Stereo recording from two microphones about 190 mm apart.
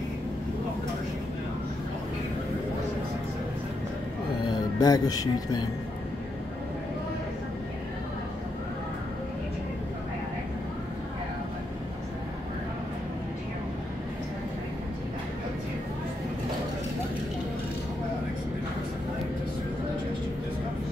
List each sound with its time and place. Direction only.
4.5 s speech: 20° left (ahead or behind)